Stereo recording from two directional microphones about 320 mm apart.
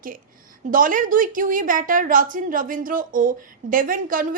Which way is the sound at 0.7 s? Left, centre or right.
Right.